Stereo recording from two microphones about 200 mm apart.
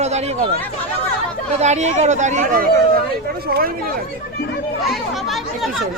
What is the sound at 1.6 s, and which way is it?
Speech, 35° right (ahead or behind).